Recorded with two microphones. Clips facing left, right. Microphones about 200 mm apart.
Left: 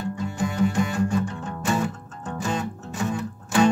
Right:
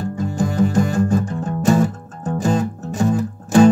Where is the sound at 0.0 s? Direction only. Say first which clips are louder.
Right 5 dB; 45° right (ahead or behind).